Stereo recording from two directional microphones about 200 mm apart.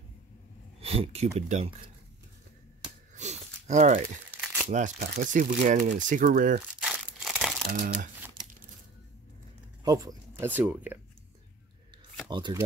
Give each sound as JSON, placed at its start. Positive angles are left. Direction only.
{"t": 0.7, "sound": "speech", "side_deg": -30}
{"t": 2.8, "sound": "a sound", "side_deg": -35}
{"t": 4.3, "sound": "crumpling", "side_deg": -10}
{"t": 4.6, "sound": "speech", "side_deg": -40}
{"t": 6.8, "sound": "crumpling", "side_deg": 0}
{"t": 7.8, "sound": "speech", "side_deg": -55}
{"t": 9.8, "sound": "speech", "side_deg": -15}
{"t": 12.3, "sound": "speech", "side_deg": -20}